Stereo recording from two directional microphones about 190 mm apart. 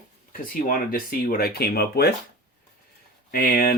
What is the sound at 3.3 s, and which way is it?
Speech, 50° left (ahead or behind).